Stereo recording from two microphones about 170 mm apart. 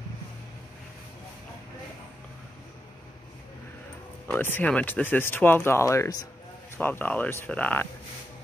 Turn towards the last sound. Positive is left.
turn(degrees=10)  # may be behind; listen again after turning